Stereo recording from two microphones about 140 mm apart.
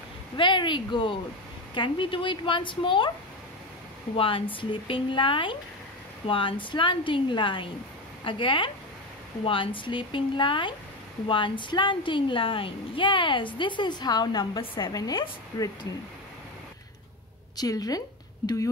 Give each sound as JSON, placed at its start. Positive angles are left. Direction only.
{"t": 0.4, "sound": "a woman's voice", "side_deg": 35}
{"t": 4.2, "sound": "a woman's voice", "side_deg": 40}
{"t": 17.6, "sound": "a woman's voice", "side_deg": 25}